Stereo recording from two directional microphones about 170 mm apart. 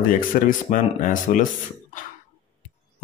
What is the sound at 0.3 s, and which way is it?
Speech, 50° left (ahead or behind).